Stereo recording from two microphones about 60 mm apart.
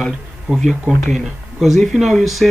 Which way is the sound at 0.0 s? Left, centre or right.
Centre.